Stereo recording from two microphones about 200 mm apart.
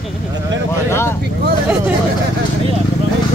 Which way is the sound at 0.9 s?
10° left (ahead or behind).